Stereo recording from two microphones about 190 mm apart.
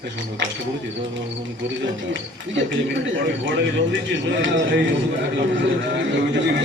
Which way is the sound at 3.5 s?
75° right (ahead or behind).